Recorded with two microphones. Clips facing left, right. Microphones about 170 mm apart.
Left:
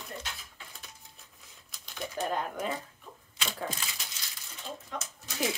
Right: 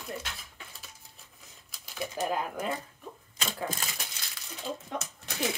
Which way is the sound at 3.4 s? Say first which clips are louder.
Right 2 dB; 45° right (ahead or behind).